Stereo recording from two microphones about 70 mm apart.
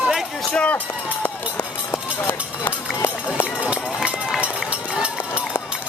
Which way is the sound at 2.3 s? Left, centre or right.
Left.